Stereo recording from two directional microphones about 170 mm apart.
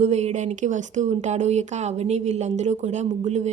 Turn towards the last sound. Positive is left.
turn(degrees=-40)  # may be behind; listen again after turning